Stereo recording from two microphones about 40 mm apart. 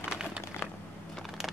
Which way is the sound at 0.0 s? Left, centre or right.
Right.